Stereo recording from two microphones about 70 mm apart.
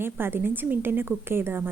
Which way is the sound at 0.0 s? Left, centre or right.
Right.